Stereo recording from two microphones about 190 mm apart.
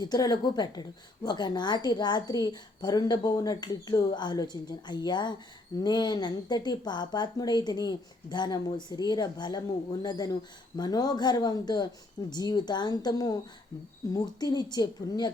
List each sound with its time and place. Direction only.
0.0 s a woman's voice: 20° left (ahead or behind)